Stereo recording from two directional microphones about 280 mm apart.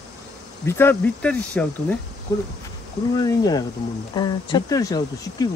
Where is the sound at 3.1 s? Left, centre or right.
Centre.